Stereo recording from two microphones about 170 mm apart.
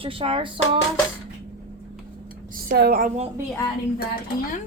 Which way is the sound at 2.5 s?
65° right (ahead or behind).